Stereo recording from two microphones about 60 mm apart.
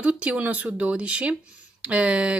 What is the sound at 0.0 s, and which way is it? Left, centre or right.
Speech, right.